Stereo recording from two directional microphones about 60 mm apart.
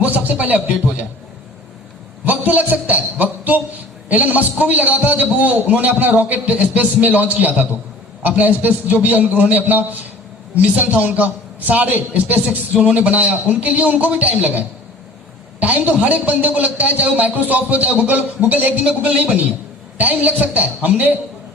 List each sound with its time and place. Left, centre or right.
0.0 s speech: right
2.2 s a man's voice: right
15.6 s a man's voice: right